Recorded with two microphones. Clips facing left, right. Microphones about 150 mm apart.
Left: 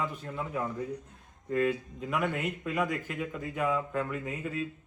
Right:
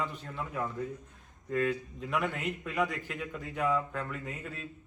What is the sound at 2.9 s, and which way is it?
Speech, 45° left (ahead or behind).